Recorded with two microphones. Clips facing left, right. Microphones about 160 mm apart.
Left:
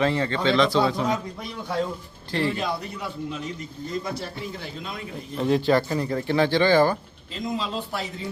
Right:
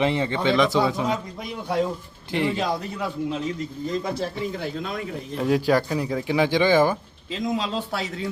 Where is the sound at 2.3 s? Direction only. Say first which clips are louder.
Right 1 dB; 15° right (ahead or behind).